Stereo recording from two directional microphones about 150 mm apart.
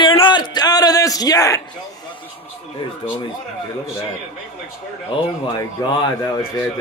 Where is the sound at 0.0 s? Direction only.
35° left (ahead or behind).